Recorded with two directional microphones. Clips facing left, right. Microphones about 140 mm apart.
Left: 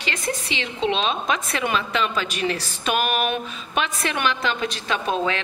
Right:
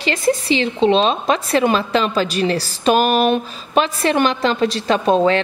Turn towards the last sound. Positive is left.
turn(degrees=-35)  # may be behind; listen again after turning